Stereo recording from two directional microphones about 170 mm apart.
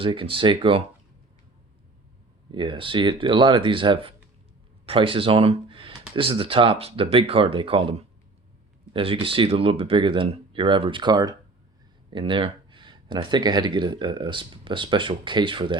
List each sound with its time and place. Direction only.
0.0 s speech: 30° right (ahead or behind)
2.5 s speech: 30° right (ahead or behind)